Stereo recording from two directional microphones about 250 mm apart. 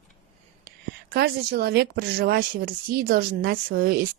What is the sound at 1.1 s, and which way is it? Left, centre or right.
Speech, right.